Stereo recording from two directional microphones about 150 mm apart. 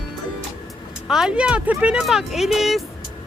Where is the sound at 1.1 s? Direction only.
5° right (ahead or behind).